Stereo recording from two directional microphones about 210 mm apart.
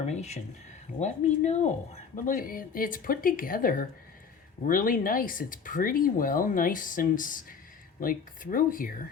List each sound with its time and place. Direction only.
0.0 s speech: 35° left (ahead or behind)